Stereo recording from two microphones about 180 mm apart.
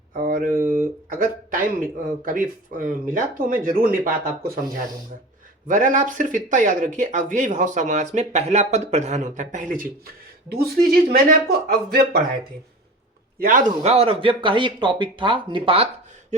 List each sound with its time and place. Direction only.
0.1 s speech: 50° right (ahead or behind)
5.6 s a woman's voice: 45° right (ahead or behind)
13.4 s speech: 50° right (ahead or behind); by 15.9 s 30° right (ahead or behind)